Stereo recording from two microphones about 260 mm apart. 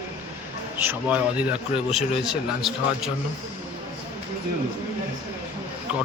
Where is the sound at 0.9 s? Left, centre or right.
Centre.